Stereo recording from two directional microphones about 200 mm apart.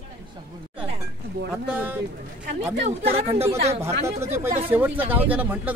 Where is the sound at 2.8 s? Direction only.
30° right (ahead or behind).